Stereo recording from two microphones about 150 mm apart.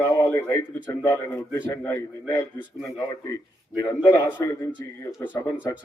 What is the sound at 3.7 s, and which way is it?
Speech, 25° left (ahead or behind).